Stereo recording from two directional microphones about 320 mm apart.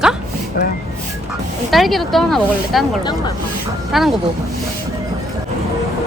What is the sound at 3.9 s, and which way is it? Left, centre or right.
Speech, centre.